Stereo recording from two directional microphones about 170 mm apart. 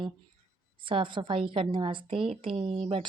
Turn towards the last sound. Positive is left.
turn(degrees=-35)  # may be behind; listen again after turning